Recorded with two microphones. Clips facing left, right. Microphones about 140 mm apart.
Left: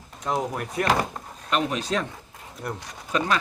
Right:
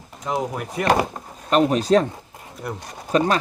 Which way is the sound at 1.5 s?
40° right (ahead or behind).